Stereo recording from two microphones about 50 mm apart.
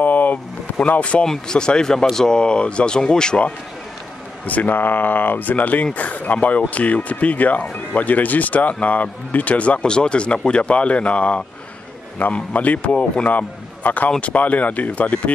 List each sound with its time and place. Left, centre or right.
0.0 s a sound: left
0.7 s speech: left
1.2 s speech: centre
4.5 s a man's voice: left